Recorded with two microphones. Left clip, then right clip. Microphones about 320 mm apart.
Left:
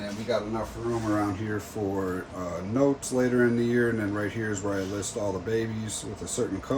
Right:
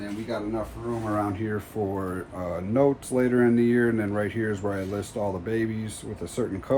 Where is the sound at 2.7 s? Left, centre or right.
Centre.